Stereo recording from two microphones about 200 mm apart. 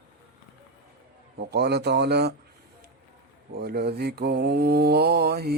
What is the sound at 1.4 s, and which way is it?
Speech, 55° right (ahead or behind).